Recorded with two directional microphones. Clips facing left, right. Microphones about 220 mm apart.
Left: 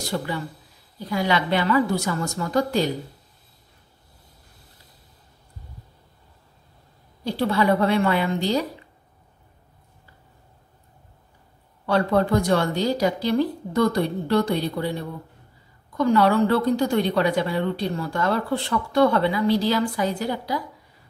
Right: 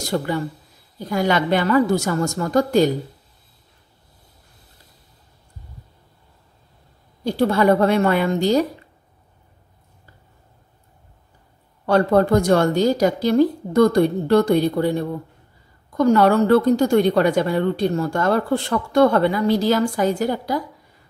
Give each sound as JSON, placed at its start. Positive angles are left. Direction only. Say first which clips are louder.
{"t": 0.1, "sound": "a woman's voice", "louder": "right 6 dB", "side_deg": -45}
{"t": 7.2, "sound": "a woman's voice", "louder": "right 4 dB", "side_deg": -45}
{"t": 11.8, "sound": "a woman's voice", "louder": "right 4 dB", "side_deg": -45}